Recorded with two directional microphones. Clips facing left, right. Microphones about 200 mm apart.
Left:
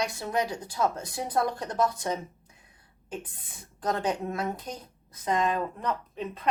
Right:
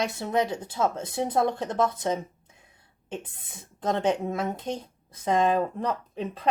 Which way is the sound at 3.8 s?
25° right (ahead or behind).